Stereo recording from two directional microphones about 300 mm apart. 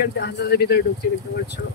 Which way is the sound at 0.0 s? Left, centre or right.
Left.